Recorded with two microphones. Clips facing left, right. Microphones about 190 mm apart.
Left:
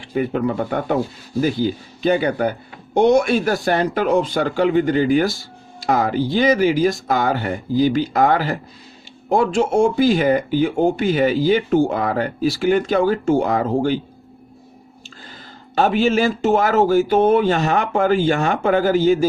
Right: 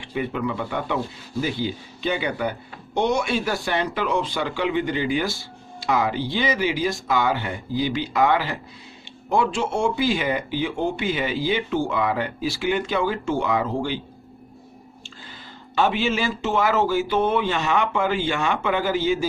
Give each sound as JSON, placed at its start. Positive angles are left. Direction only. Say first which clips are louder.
{"t": 0.0, "sound": "speech", "louder": "left 6 dB", "side_deg": 40}
{"t": 15.7, "sound": "speech", "louder": "left 5 dB", "side_deg": 45}